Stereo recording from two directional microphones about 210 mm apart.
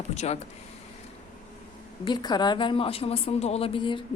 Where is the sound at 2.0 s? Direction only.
20° left (ahead or behind).